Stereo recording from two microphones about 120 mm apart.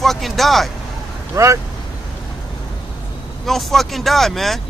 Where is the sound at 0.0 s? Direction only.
Centre (ahead or behind).